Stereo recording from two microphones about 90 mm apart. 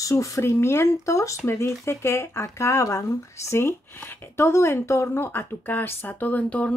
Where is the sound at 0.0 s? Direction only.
35° left (ahead or behind).